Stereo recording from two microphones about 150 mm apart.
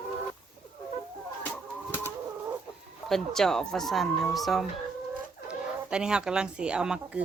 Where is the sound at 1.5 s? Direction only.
15° left (ahead or behind).